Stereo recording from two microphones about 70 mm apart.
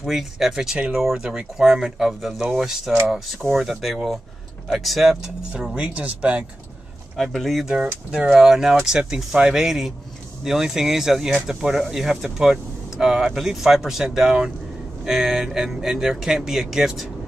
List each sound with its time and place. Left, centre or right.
0.0 s speech: centre
7.2 s speech: centre
7.6 s speech: centre
8.3 s speech: centre